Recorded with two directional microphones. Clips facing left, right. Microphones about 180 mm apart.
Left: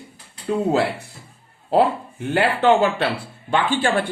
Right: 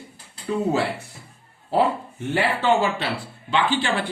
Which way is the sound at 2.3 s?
60° left (ahead or behind).